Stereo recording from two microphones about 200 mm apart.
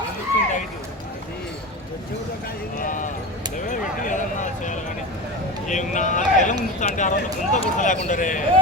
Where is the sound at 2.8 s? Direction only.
40° left (ahead or behind).